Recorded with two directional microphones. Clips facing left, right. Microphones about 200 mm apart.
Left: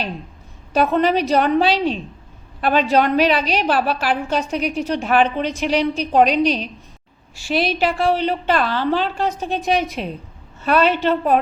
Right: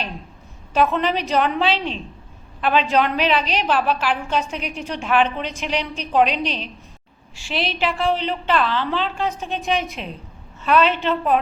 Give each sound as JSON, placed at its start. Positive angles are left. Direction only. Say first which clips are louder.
{"t": 0.7, "sound": "a woman's voice", "louder": "left 3 dB", "side_deg": 40}